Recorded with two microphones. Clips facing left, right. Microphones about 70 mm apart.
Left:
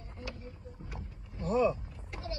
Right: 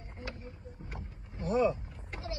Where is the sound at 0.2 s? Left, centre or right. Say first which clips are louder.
Even; right.